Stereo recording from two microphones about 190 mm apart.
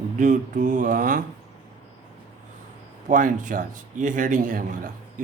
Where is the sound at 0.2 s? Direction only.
45° right (ahead or behind).